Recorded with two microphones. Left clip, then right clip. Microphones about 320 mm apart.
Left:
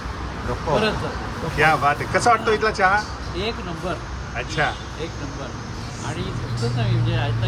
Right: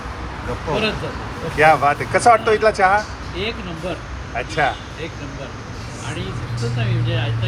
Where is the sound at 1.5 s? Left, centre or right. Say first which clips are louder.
Right 4 dB; centre.